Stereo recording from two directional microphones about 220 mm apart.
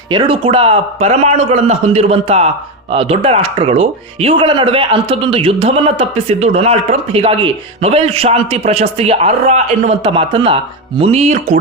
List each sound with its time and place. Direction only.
0.1 s speech: 25° right (ahead or behind)